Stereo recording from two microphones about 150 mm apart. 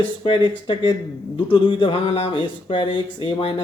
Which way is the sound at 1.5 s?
35° left (ahead or behind).